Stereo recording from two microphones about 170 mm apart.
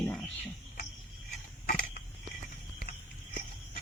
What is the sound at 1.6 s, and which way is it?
Creak, 55° left (ahead or behind).